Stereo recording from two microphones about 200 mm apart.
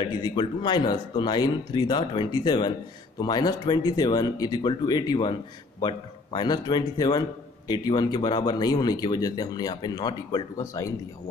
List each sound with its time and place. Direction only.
0.0 s speech: 25° left (ahead or behind)